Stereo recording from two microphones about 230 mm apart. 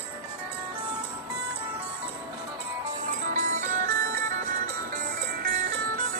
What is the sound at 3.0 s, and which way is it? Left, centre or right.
Music, right.